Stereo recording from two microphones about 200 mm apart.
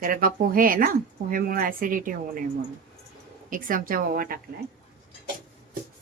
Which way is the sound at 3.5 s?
45° right (ahead or behind).